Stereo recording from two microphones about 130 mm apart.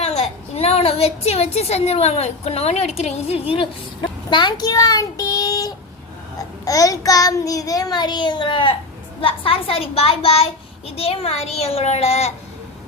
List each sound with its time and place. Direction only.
0.0 s a woman's voice: 55° left (ahead or behind)
4.3 s child singing: 35° left (ahead or behind)
9.2 s a child's voice: 45° left (ahead or behind)